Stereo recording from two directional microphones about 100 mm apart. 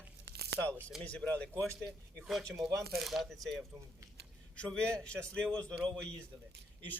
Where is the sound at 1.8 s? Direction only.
Centre (ahead or behind).